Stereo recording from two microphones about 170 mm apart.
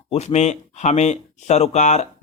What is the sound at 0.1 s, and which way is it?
Speech, 40° left (ahead or behind).